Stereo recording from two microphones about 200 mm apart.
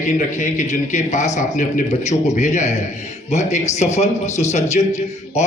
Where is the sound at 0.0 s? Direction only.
40° left (ahead or behind).